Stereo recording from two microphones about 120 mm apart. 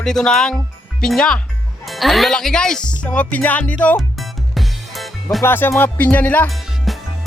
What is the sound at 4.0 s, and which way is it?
Music, centre (ahead or behind).